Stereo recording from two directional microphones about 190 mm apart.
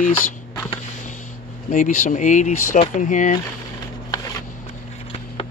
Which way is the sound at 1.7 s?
45° left (ahead or behind).